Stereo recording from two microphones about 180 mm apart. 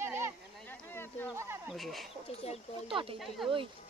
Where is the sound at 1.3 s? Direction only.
15° right (ahead or behind).